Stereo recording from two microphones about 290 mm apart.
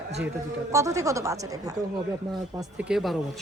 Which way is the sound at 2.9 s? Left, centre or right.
Centre.